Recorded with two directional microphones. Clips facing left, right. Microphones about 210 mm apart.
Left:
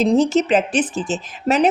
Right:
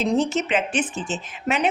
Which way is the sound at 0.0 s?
35° left (ahead or behind).